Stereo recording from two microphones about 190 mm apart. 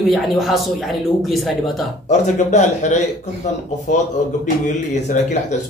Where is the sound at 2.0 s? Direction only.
40° left (ahead or behind).